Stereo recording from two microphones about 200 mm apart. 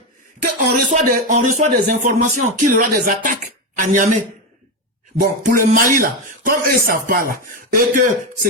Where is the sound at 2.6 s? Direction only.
40° right (ahead or behind).